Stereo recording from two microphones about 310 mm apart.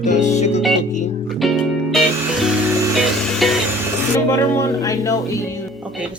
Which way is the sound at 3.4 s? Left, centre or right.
Centre.